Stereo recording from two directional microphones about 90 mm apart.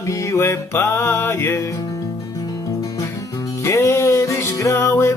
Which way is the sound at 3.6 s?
35° left (ahead or behind).